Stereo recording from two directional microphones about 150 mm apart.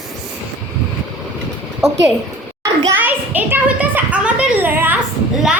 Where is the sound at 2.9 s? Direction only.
10° right (ahead or behind).